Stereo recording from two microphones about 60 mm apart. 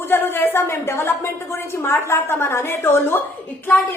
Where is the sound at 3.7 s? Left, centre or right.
Left.